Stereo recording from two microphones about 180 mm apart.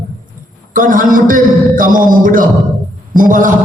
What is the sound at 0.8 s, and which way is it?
A man's voice, 50° right (ahead or behind).